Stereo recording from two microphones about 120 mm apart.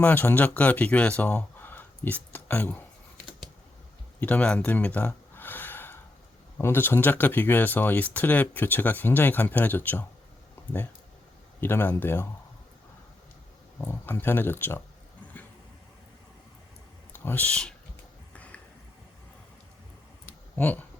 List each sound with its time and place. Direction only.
0.0 s speech: 15° left (ahead or behind)
4.2 s a sound: 10° left (ahead or behind)
6.6 s speech: 20° left (ahead or behind)
11.6 s speech: 15° left (ahead or behind)
13.8 s speech: 20° left (ahead or behind)
17.1 s speech: 15° left (ahead or behind)
20.6 s speech: 15° left (ahead or behind)